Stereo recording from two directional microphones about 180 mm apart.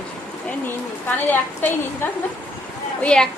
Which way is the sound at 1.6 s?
10° left (ahead or behind).